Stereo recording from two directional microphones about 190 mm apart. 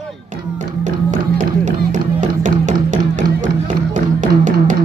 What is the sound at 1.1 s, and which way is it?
Music, 40° right (ahead or behind).